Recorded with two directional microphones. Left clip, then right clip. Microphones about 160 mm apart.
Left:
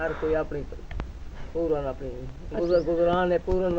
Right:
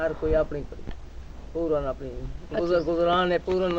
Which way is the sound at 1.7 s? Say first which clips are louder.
Right 1 dB; 10° right (ahead or behind).